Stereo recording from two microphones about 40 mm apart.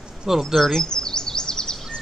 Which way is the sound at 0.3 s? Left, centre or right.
Centre.